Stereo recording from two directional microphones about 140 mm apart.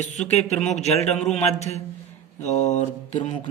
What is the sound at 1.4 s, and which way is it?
Speech, 50° left (ahead or behind).